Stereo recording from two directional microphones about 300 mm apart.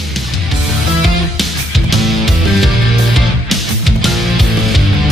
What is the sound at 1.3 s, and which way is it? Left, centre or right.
Music, centre.